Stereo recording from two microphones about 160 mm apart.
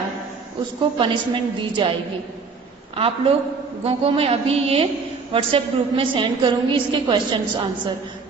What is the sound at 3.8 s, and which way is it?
A woman's voice, 35° right (ahead or behind).